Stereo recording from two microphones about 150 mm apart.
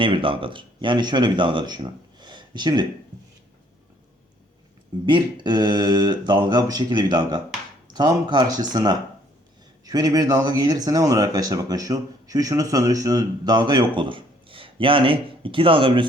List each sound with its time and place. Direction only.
0.0 s speech: 35° right (ahead or behind)
5.0 s speech: 30° right (ahead or behind)